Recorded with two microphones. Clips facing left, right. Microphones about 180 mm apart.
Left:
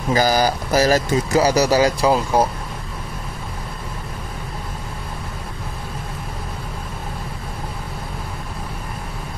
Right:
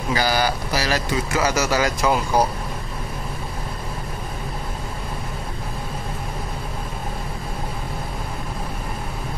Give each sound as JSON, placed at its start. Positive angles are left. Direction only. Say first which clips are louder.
{"t": 0.1, "sound": "speech", "louder": "left 4 dB", "side_deg": 40}